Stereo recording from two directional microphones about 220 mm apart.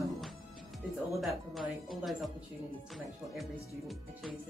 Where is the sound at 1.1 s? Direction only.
Centre (ahead or behind).